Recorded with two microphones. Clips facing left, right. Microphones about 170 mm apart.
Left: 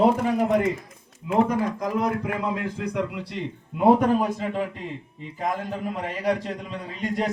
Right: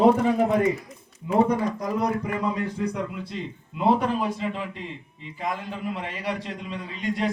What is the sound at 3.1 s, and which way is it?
Speech, 75° left (ahead or behind).